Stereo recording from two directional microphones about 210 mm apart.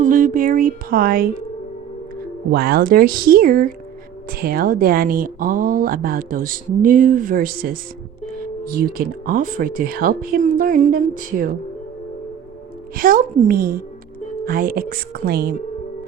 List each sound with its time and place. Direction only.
0.0 s speech: 40° right (ahead or behind)
2.5 s speech: 45° right (ahead or behind)
13.0 s speech: 40° right (ahead or behind)